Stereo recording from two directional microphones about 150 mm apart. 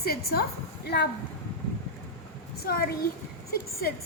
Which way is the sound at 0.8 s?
90° left.